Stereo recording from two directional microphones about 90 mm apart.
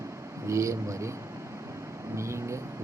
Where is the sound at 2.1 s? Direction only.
30° right (ahead or behind).